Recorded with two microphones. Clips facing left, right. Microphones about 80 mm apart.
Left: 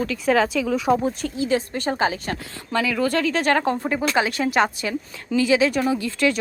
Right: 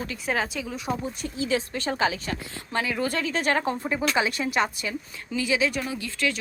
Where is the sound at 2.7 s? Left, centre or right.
Left.